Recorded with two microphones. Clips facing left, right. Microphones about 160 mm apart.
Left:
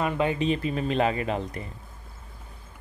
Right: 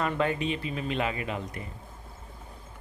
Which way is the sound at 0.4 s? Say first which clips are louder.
Left 5 dB; 40° left (ahead or behind).